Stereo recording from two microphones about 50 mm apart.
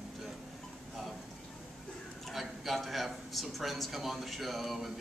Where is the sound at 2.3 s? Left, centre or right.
Centre.